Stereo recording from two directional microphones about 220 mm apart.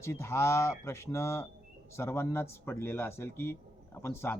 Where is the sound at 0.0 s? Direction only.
10° left (ahead or behind).